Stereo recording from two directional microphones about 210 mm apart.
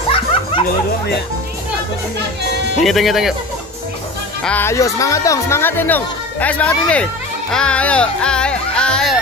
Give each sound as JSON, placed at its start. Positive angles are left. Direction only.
{"t": 0.1, "sound": "music", "side_deg": 25}
{"t": 2.8, "sound": "speech", "side_deg": 0}
{"t": 4.4, "sound": "speech", "side_deg": 5}